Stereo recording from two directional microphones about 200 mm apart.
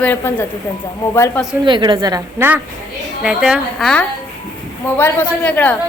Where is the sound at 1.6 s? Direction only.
25° right (ahead or behind).